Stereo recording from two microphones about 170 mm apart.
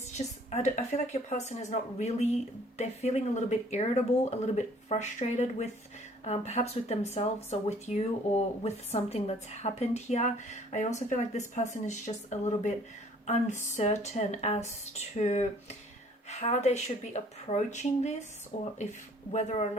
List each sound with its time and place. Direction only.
0.2 s speech: 40° left (ahead or behind)